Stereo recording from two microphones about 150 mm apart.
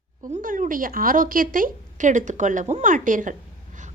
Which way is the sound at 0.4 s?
60° right (ahead or behind).